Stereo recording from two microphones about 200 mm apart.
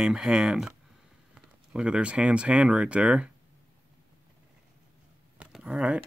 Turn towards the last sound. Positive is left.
turn(degrees=-5)  # may be behind; listen again after turning